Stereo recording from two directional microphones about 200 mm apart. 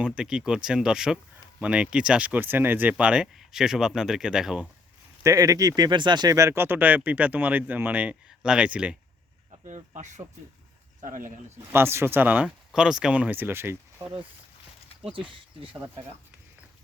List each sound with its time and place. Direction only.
0.0 s speech: 5° right (ahead or behind)
5.2 s speech: 15° right (ahead or behind)
9.5 s speech: 35° right (ahead or behind)
11.5 s speech: 10° right (ahead or behind)